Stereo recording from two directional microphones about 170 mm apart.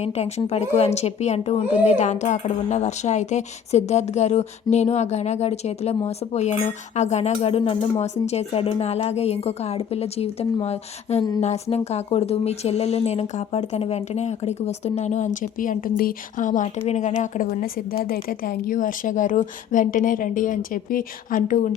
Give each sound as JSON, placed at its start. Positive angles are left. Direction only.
{"t": 0.0, "sound": "speech", "side_deg": 40}
{"t": 18.0, "sound": "speech", "side_deg": 60}